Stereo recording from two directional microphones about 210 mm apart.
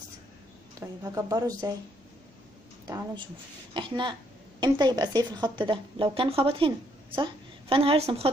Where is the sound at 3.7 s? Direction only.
20° right (ahead or behind).